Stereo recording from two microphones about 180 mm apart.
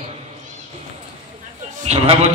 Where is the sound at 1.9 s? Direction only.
35° right (ahead or behind).